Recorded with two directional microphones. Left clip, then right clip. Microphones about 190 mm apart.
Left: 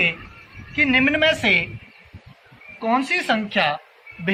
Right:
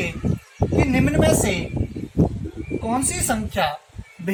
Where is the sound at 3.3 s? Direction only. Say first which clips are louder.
Even; 25° right (ahead or behind).